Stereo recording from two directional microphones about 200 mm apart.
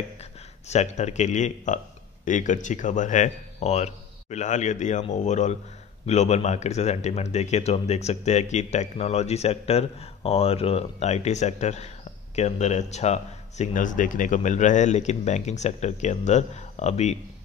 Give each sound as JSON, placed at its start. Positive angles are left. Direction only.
{"t": 0.2, "sound": "speech", "side_deg": 35}